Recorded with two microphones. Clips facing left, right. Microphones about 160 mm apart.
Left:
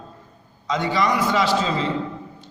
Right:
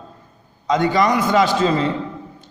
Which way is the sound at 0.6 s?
50° right (ahead or behind).